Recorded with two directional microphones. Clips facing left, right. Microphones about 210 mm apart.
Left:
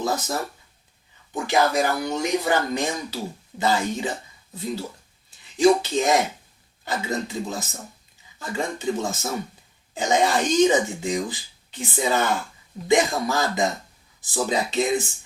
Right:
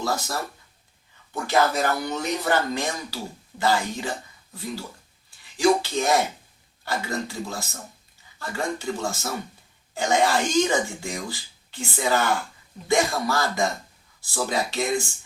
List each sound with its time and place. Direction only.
0.0 s speech: 20° left (ahead or behind)